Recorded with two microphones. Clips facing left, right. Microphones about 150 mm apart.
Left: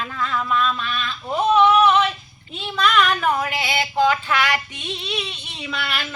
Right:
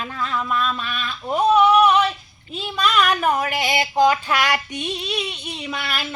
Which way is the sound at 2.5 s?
10° right (ahead or behind).